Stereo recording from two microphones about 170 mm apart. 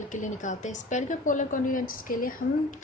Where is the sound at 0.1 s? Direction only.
45° left (ahead or behind).